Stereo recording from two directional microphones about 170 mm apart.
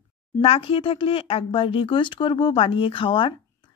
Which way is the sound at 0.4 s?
35° left (ahead or behind).